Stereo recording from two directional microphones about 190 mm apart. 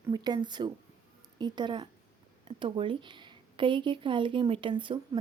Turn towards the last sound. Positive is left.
turn(degrees=-25)  # may be behind; listen again after turning